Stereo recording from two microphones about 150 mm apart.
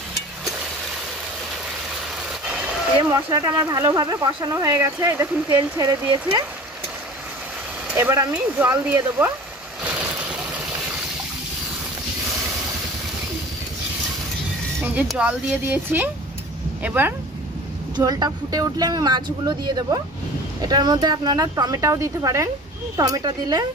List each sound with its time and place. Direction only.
3.0 s speech: 30° right (ahead or behind)
7.9 s speech: 15° right (ahead or behind)
9.8 s vehicle: 10° right (ahead or behind)
15.0 s speech: 10° right (ahead or behind)
17.9 s speech: 25° right (ahead or behind)